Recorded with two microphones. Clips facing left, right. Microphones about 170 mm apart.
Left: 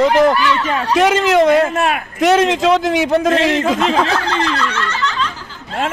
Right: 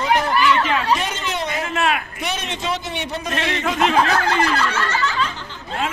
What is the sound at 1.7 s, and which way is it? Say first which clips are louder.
Speech: left 3 dB; 40° left (ahead or behind).